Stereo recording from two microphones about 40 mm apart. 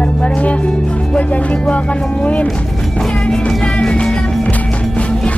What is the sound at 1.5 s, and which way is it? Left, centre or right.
Speech, left.